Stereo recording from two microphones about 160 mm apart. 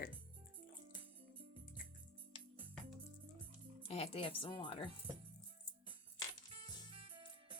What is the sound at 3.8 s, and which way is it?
Speech, 40° left (ahead or behind).